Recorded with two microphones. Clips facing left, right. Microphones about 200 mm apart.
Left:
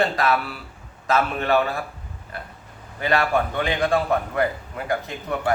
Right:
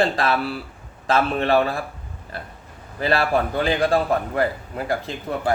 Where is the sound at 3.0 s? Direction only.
30° right (ahead or behind).